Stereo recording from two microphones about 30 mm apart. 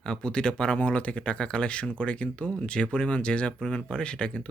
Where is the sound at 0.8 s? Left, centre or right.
Left.